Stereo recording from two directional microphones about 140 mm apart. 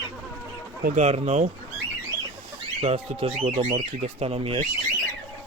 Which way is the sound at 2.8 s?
45° right (ahead or behind).